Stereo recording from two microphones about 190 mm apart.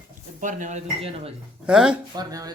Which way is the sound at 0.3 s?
40° right (ahead or behind).